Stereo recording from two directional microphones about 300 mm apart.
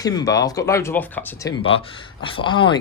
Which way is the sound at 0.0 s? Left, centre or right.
Centre.